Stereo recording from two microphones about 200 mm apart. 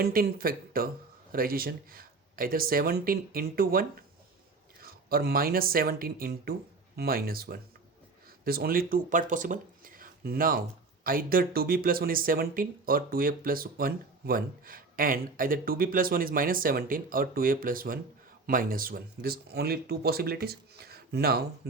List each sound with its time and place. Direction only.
0.0 s speech: 50° right (ahead or behind)